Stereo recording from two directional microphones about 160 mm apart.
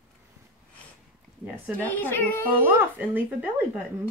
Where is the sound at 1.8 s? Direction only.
10° left (ahead or behind).